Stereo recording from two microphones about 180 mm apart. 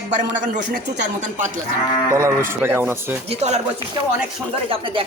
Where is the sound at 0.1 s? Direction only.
45° right (ahead or behind).